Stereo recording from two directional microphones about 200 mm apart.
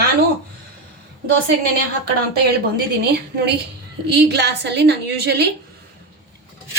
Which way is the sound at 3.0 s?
55° right (ahead or behind).